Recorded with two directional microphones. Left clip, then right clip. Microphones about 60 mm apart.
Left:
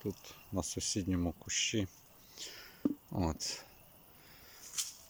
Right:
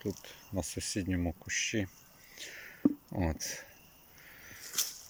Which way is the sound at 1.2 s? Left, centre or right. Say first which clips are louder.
Right 1 dB; left.